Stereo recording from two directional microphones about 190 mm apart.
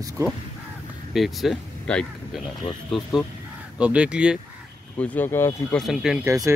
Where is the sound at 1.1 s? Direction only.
Centre (ahead or behind).